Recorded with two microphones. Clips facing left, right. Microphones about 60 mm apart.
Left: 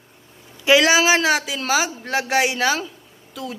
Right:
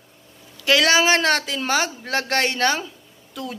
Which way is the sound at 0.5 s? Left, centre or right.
Centre.